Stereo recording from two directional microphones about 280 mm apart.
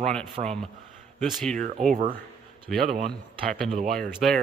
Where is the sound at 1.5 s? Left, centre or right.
Right.